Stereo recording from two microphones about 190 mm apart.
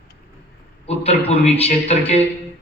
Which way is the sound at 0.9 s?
35° left (ahead or behind).